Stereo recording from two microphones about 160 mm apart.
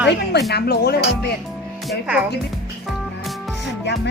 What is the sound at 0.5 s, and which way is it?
Speech, 85° left.